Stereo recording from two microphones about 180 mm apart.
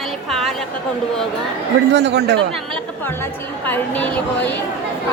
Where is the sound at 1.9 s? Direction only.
70° right (ahead or behind).